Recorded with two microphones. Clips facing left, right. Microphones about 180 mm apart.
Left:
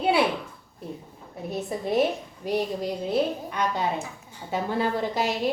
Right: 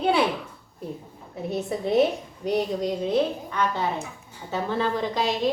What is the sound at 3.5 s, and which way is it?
A woman's voice, 15° left (ahead or behind).